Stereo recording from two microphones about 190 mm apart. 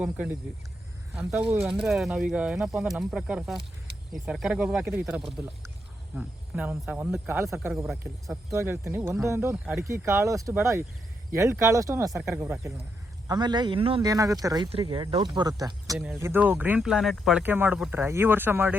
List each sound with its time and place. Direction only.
0.0 s speech: 5° right (ahead or behind)
16.0 s speech: 5° right (ahead or behind)